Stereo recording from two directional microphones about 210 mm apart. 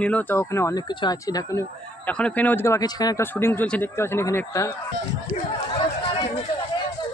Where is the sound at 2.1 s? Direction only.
5° left (ahead or behind).